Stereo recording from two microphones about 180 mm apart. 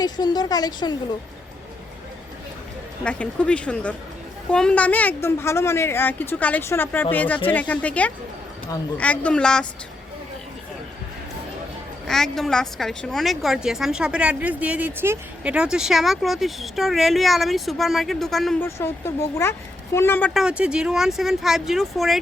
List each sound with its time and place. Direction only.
0.0 s a woman's voice: 20° left (ahead or behind)
3.0 s a woman's voice: 5° left (ahead or behind)
12.0 s a woman's voice: centre (ahead or behind)
18.6 s a woman's voice: 15° left (ahead or behind)
20.3 s a woman's voice: 5° right (ahead or behind)